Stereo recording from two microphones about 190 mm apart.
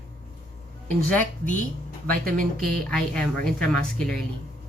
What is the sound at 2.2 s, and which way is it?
Speech, 50° right (ahead or behind).